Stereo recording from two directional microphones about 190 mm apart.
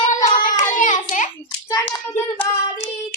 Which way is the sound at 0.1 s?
45° left (ahead or behind).